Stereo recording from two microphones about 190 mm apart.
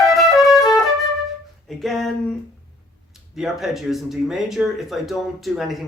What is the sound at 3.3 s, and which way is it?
Speech, centre (ahead or behind).